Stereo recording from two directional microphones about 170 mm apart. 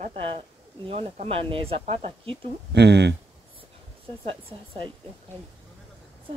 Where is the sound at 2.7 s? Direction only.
85° right.